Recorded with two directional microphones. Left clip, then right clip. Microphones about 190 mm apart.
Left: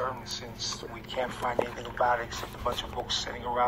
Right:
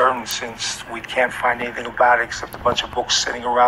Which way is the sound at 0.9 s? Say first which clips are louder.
Right 17 dB; 20° right (ahead or behind).